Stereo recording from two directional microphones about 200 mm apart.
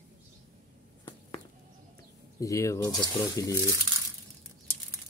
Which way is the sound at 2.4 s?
15° left (ahead or behind).